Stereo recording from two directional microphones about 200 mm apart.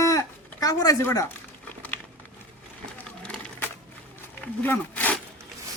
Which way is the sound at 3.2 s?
5° left (ahead or behind).